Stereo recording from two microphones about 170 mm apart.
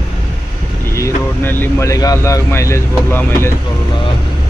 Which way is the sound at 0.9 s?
15° left (ahead or behind).